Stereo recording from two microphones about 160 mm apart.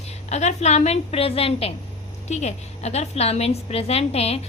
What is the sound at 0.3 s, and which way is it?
A woman's voice, 45° left (ahead or behind).